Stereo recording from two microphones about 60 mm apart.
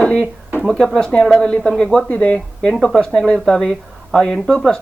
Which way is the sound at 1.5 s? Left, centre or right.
Centre.